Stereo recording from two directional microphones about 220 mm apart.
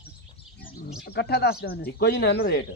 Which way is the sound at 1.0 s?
45° left (ahead or behind).